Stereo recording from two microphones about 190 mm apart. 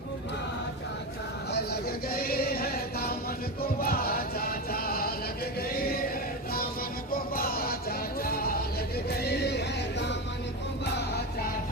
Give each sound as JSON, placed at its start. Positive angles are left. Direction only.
{"t": 1.5, "sound": "music", "side_deg": 55}
{"t": 5.6, "sound": "chant", "side_deg": 55}
{"t": 7.1, "sound": "music", "side_deg": 50}
{"t": 9.0, "sound": "a sound", "side_deg": 60}